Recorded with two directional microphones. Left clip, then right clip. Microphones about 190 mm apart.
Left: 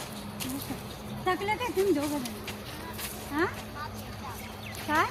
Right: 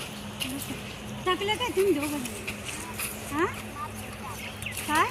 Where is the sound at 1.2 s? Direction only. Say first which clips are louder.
Right 2 dB; 20° left (ahead or behind).